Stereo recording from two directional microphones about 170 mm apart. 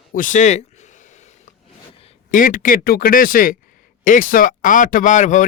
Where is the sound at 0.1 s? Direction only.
50° left (ahead or behind).